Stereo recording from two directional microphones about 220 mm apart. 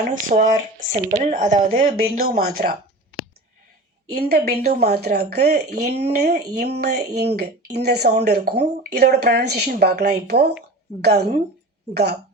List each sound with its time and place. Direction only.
0.1 s speech: 35° right (ahead or behind)
4.1 s speech: 45° right (ahead or behind)